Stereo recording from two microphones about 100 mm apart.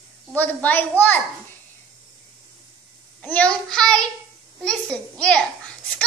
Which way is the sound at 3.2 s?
15° left (ahead or behind).